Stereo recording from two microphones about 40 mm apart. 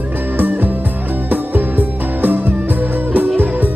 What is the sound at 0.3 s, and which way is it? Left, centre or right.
Music, right.